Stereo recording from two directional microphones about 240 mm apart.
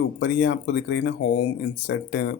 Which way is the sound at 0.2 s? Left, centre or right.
Left.